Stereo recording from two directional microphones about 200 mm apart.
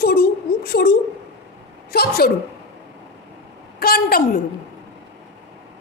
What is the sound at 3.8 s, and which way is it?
Speech, 50° left (ahead or behind).